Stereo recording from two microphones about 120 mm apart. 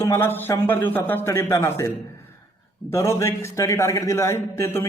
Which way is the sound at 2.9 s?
25° left (ahead or behind).